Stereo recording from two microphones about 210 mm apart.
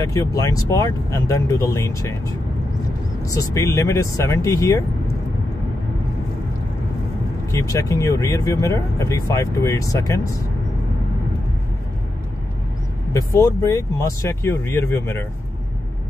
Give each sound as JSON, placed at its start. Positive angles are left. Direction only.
{"t": 0.0, "sound": "speech", "side_deg": 15}
{"t": 7.5, "sound": "speech", "side_deg": 15}
{"t": 13.1, "sound": "speech", "side_deg": 15}